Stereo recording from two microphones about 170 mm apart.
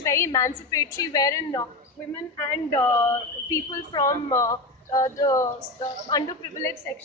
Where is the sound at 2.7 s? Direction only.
15° left (ahead or behind).